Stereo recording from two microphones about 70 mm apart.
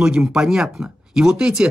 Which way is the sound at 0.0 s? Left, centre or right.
Centre.